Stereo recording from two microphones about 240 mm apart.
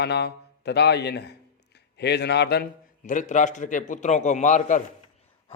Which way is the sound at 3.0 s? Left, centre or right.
Left.